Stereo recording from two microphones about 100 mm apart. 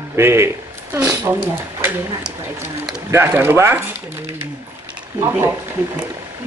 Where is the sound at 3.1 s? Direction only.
25° right (ahead or behind).